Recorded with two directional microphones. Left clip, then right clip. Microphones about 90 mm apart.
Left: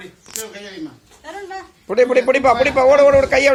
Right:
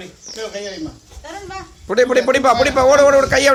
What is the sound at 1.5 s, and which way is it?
A man's voice, 10° right (ahead or behind).